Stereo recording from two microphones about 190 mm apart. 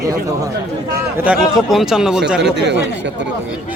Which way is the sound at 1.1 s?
5° right (ahead or behind).